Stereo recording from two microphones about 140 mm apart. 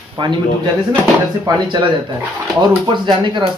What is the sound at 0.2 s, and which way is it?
Speech, 35° right (ahead or behind).